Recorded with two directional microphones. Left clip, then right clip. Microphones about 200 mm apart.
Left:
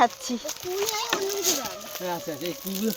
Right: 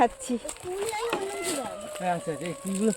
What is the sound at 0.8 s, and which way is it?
Speech, 15° left (ahead or behind).